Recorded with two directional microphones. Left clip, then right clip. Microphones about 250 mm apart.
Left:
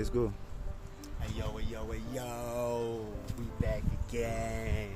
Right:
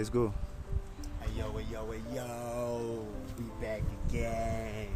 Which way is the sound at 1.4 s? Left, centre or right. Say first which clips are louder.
Right 2 dB; centre.